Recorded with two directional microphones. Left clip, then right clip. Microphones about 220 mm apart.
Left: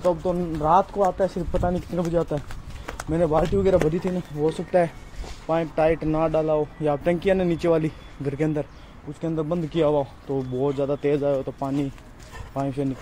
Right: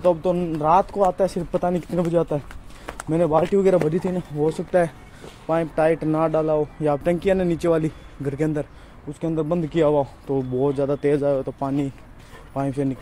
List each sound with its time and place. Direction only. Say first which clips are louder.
0.0 s speech: right 3 dB; 20° right (ahead or behind)
4.6 s a man's voice: right 1 dB; 15° right (ahead or behind)
7.0 s a man's voice: left 1 dB; 10° right (ahead or behind)
9.2 s a man's voice: right 3 dB; 20° right (ahead or behind)